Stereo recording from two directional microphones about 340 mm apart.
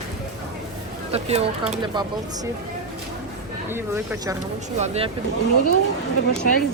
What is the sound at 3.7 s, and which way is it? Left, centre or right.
Speech, centre.